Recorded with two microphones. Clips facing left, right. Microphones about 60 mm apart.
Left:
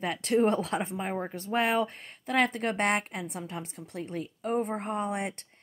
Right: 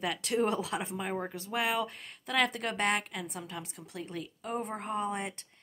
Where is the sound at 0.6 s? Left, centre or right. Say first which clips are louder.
Left 4 dB; left.